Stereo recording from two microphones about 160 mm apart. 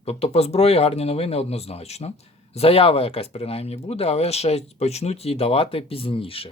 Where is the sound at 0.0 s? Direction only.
40° left (ahead or behind).